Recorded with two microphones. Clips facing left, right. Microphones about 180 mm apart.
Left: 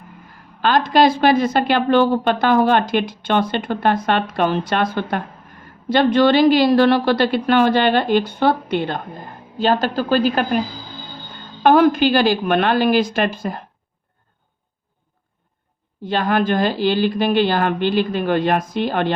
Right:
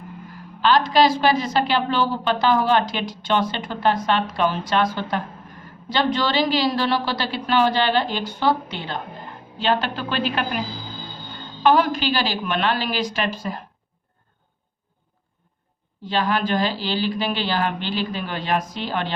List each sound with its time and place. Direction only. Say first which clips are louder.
0.6 s speech: left 2 dB; 50° left (ahead or behind)
9.6 s a woman's voice: left 5 dB; 40° left (ahead or behind)
11.6 s speech: left 5 dB; 50° left (ahead or behind)
16.0 s speech: left 4 dB; 55° left (ahead or behind)